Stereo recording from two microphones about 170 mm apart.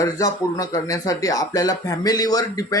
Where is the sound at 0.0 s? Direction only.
20° left (ahead or behind).